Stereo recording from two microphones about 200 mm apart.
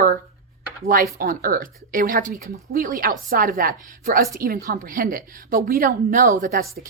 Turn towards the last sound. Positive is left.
turn(degrees=-45)  # may be behind; listen again after turning